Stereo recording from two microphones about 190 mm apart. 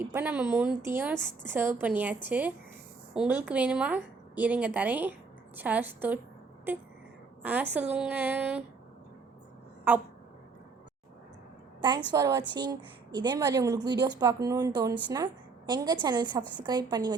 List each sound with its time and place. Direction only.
0.0 s a woman's voice: 10° right (ahead or behind)
11.8 s speech: 25° right (ahead or behind)
16.4 s a woman's voice: 10° left (ahead or behind)
16.6 s speech: 20° right (ahead or behind)